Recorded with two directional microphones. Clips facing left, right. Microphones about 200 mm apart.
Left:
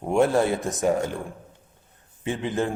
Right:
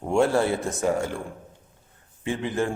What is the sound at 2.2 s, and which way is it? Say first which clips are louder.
Speech: even; 20° left (ahead or behind).